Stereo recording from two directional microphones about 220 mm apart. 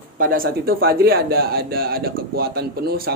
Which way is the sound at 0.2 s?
40° right (ahead or behind).